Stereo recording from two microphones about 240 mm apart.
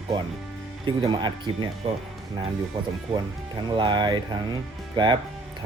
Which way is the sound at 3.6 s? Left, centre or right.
Centre.